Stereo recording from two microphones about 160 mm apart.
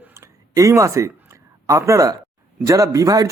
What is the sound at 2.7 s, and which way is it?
Speech, 20° right (ahead or behind).